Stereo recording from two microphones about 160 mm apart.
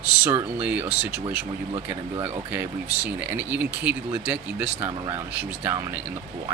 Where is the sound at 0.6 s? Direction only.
10° right (ahead or behind).